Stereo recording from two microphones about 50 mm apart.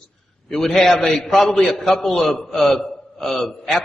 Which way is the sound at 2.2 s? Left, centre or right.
Centre.